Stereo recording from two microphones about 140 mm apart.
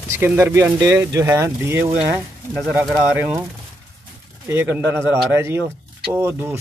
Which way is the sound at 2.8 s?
5° right (ahead or behind).